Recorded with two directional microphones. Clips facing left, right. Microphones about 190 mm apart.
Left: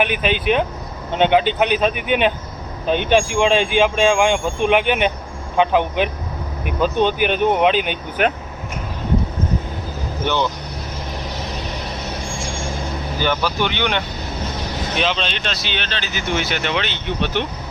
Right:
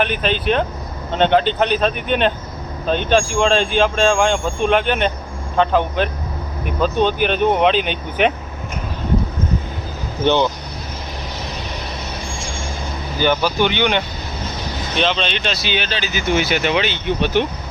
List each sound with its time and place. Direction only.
0.0 s speech: 10° left (ahead or behind)
10.2 s speech: 20° right (ahead or behind)
13.2 s speech: centre (ahead or behind)